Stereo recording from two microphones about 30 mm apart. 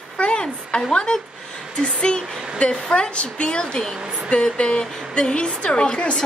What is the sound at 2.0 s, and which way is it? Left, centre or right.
A woman's voice, left.